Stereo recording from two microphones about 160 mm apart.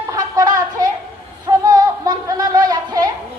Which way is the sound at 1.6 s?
20° right (ahead or behind).